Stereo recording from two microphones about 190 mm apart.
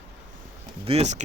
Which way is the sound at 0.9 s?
35° right (ahead or behind).